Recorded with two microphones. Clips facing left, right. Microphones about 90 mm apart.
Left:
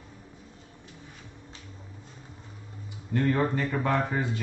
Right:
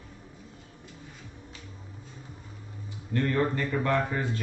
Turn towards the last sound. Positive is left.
turn(degrees=15)  # may be behind; listen again after turning